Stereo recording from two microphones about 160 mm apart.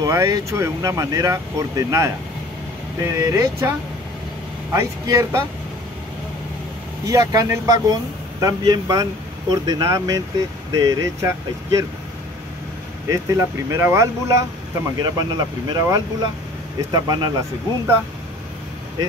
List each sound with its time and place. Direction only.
0.0 s speech: 20° right (ahead or behind)
5.0 s speech: 20° right (ahead or behind)
7.1 s speech: 20° right (ahead or behind)
13.1 s speech: 20° right (ahead or behind)